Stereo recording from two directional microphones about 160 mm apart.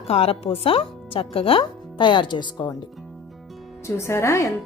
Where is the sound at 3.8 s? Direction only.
15° left (ahead or behind).